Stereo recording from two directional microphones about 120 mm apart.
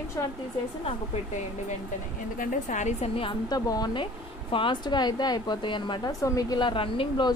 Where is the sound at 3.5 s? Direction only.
35° left (ahead or behind).